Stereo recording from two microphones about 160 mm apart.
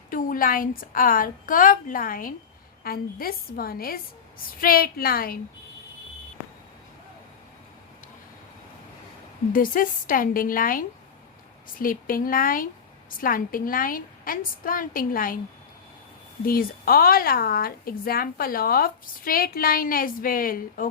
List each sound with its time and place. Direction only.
0.1 s a woman's voice: 60° left (ahead or behind)
9.5 s speech: 60° left (ahead or behind)
16.5 s speech: 65° left (ahead or behind)